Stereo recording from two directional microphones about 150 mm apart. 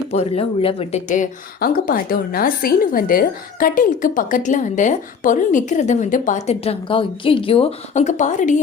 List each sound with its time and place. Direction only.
0.1 s speech: 45° left (ahead or behind)
1.1 s a woman's voice: 65° left (ahead or behind); by 7.7 s 40° left (ahead or behind)
7.9 s a woman's voice: 55° left (ahead or behind)